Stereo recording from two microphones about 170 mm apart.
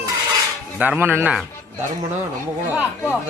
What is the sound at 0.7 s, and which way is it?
Speech, 10° right (ahead or behind).